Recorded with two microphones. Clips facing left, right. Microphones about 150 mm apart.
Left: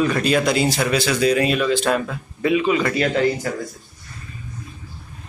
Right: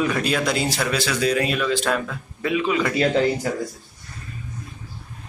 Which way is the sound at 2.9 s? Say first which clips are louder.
Even; 20° right (ahead or behind).